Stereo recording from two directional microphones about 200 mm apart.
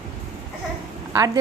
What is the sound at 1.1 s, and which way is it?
Speech, 15° right (ahead or behind).